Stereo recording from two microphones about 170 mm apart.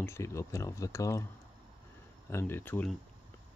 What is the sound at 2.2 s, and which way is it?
Speech, 15° left (ahead or behind).